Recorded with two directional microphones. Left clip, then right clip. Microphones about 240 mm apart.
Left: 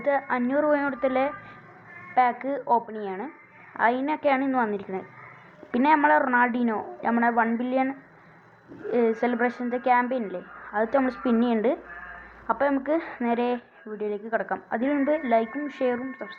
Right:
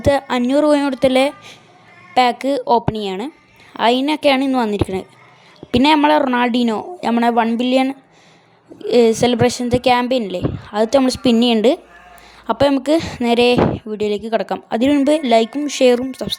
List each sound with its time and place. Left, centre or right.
0.3 s speech: right